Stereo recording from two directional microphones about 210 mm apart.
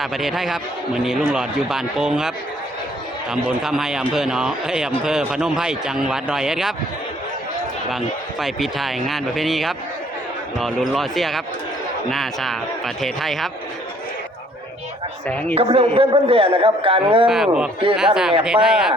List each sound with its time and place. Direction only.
0.0 s speech: centre (ahead or behind)
3.6 s speech: 5° right (ahead or behind)
7.9 s speech: centre (ahead or behind)
15.3 s speech: 5° left (ahead or behind)
15.5 s a man's voice: 25° right (ahead or behind)
17.2 s speech: 5° right (ahead or behind)